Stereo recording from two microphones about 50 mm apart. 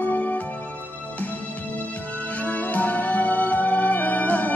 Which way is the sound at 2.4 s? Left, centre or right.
Left.